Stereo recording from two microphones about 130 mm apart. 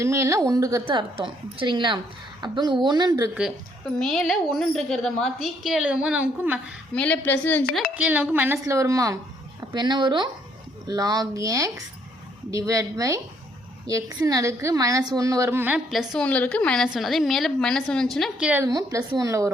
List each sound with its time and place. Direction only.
0.0 s a woman's voice: 25° right (ahead or behind)
4.0 s a woman's voice: centre (ahead or behind)
6.9 s a woman's voice: 10° left (ahead or behind)
7.9 s a woman's voice: 10° right (ahead or behind)
8.6 s a woman's voice: 25° right (ahead or behind)
15.9 s a woman's voice: centre (ahead or behind)
18.3 s a woman's voice: 10° right (ahead or behind)
18.6 s a woman's voice: 25° right (ahead or behind)